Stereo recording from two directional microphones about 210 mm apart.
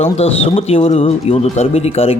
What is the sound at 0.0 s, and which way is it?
Speech, 30° left (ahead or behind).